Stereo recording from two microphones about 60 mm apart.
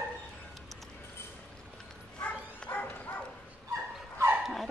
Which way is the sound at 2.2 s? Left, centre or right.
Left.